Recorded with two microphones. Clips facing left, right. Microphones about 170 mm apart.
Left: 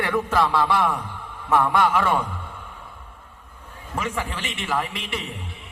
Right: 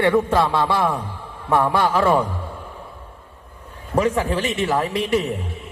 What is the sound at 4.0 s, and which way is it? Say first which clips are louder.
A man's voice: right 9 dB; 40° right (ahead or behind).